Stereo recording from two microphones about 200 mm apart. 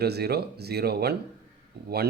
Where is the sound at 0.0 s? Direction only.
55° right (ahead or behind).